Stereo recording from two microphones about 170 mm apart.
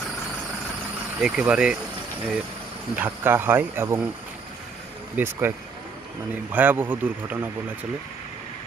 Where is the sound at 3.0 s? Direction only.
10° right (ahead or behind).